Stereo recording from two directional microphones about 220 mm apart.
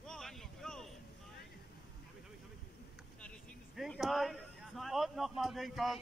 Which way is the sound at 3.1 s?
5° left (ahead or behind).